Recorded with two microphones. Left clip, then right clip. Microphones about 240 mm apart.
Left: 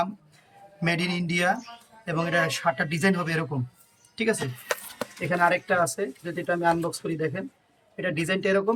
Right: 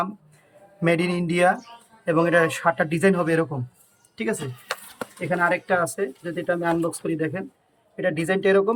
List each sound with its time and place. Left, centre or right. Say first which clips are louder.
0.8 s a man's voice: right 5 dB; centre